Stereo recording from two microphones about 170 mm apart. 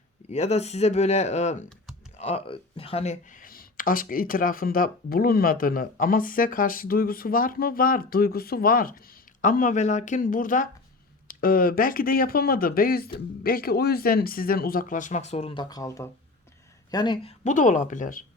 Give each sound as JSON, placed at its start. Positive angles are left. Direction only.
{"t": 0.3, "sound": "speech", "side_deg": 40}
{"t": 17.4, "sound": "speech", "side_deg": 50}